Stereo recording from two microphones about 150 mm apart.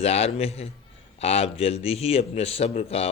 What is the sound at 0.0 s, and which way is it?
A man's voice, 40° left (ahead or behind).